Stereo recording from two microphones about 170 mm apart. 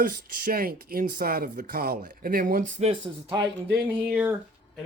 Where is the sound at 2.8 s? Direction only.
30° right (ahead or behind).